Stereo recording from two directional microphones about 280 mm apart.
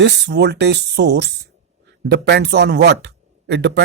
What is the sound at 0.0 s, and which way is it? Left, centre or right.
Speech, right.